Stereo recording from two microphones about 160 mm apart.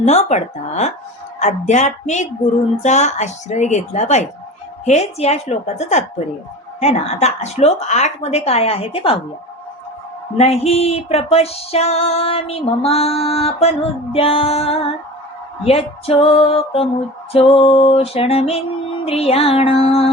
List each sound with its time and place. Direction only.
0.0 s a woman's voice: 45° left (ahead or behind)
6.7 s music: 40° left (ahead or behind)
10.3 s music: 40° left (ahead or behind)